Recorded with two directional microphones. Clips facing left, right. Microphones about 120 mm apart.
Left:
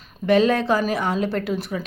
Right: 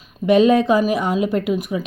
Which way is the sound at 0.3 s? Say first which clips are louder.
Right 4 dB; 20° right (ahead or behind).